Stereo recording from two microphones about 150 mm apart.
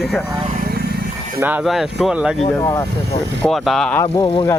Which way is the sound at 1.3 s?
10° right (ahead or behind).